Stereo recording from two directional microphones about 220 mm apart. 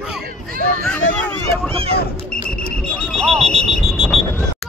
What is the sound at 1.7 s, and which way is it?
Speech, 25° right (ahead or behind).